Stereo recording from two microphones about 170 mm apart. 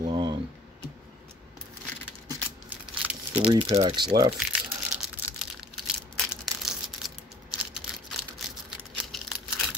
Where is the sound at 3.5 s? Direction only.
35° right (ahead or behind).